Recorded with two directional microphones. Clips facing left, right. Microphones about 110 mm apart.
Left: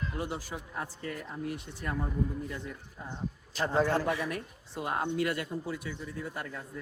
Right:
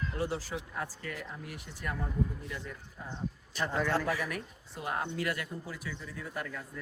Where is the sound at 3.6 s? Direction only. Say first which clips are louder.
Left 3 dB; 30° left (ahead or behind).